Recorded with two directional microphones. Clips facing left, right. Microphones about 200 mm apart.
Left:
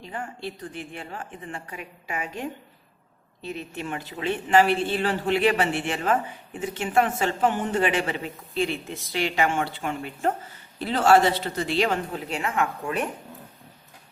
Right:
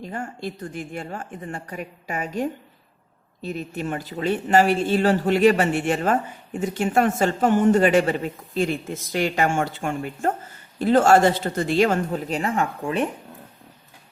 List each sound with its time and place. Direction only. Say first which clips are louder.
0.0 s speech: right 3 dB; 45° right (ahead or behind)